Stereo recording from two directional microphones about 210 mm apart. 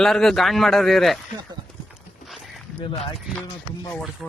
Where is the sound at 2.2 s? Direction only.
Centre (ahead or behind).